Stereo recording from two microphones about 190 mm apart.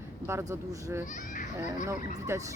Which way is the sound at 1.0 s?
40° left (ahead or behind).